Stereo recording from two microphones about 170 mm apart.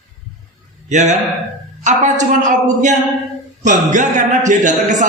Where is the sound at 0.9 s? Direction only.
45° right (ahead or behind).